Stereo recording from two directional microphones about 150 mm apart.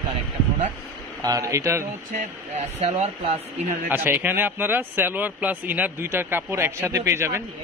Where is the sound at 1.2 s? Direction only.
20° right (ahead or behind).